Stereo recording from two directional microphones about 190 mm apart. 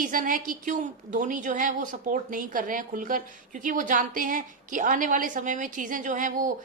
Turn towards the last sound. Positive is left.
turn(degrees=-45)  # may be behind; listen again after turning